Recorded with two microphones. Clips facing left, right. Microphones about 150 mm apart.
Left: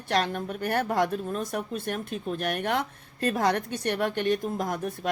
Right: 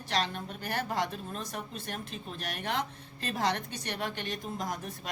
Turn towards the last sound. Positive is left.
turn(degrees=50)  # may be behind; listen again after turning